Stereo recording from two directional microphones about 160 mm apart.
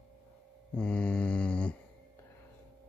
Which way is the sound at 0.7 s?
5° left (ahead or behind).